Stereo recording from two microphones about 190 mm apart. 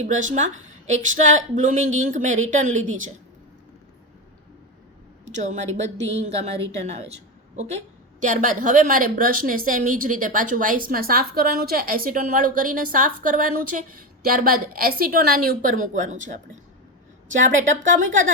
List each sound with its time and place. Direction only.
0.0 s a woman's voice: 40° right (ahead or behind)
5.2 s a woman's voice: 40° right (ahead or behind)